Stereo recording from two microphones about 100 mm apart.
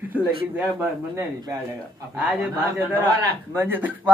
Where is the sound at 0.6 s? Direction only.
20° right (ahead or behind).